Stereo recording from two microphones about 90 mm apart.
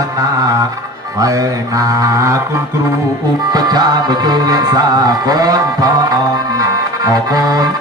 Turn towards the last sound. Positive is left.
turn(degrees=-45)  # may be behind; listen again after turning